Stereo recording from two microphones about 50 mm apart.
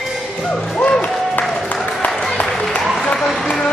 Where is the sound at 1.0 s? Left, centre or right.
Left.